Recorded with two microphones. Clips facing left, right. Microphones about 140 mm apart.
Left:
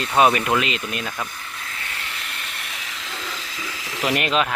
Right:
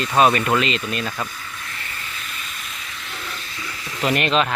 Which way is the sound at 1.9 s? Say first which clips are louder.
Left 1 dB; 80° left.